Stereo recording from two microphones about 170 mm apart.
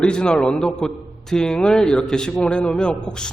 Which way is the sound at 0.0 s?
5° left (ahead or behind).